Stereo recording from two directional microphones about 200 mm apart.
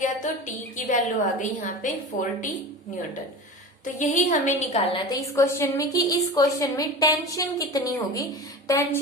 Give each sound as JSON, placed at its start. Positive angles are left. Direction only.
{"t": 0.0, "sound": "a woman's voice", "side_deg": 40}
{"t": 3.9, "sound": "a woman's voice", "side_deg": 40}
{"t": 4.9, "sound": "a woman's voice", "side_deg": 15}